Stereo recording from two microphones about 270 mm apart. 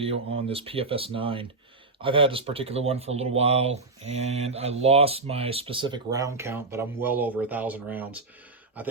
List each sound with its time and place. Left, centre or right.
0.3 s speech: right